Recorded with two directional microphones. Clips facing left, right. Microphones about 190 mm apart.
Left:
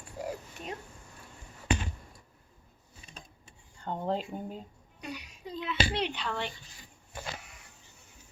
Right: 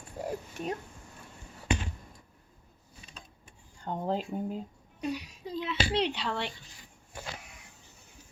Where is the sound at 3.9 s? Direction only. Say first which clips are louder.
Right 1 dB; 5° right (ahead or behind).